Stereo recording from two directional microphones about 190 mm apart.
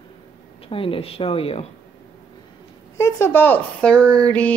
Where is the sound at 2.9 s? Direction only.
15° left (ahead or behind).